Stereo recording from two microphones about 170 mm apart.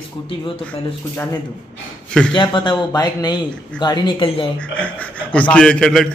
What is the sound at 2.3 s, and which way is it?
Speech, 25° left (ahead or behind).